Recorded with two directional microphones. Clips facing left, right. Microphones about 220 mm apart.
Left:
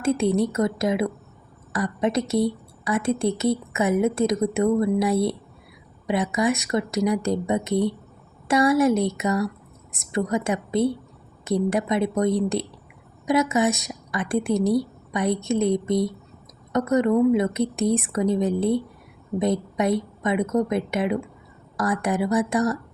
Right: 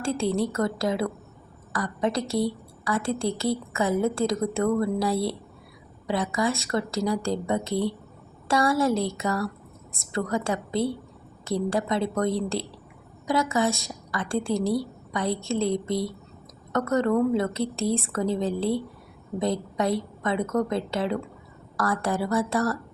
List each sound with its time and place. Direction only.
0.0 s a woman's voice: 20° left (ahead or behind)